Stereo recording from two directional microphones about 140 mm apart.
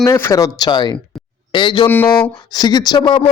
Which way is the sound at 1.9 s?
15° left (ahead or behind).